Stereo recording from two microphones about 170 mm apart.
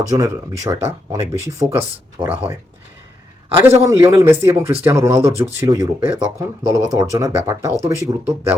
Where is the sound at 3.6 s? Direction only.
15° right (ahead or behind).